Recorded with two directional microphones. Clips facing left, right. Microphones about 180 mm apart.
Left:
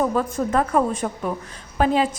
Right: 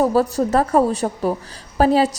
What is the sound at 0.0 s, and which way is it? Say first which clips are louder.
A woman's voice: right 5 dB; 35° right (ahead or behind).